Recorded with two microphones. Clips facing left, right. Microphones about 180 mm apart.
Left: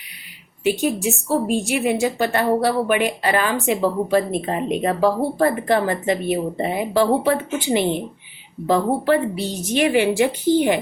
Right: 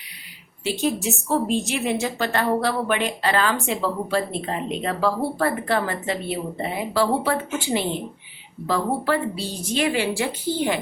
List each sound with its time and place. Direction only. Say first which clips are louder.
0.6 s a woman's voice: left 4 dB; 15° left (ahead or behind)